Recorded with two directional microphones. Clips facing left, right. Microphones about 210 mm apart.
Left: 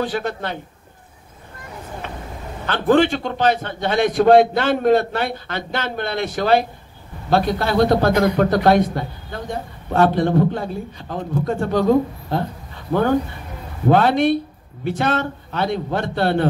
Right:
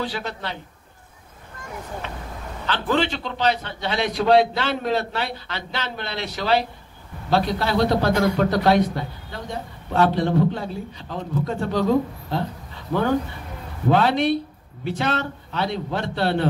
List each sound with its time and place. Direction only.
0.0 s a man's voice: 50° left (ahead or behind)
2.6 s a man's voice: 50° left (ahead or behind)
13.8 s a man's voice: 50° left (ahead or behind)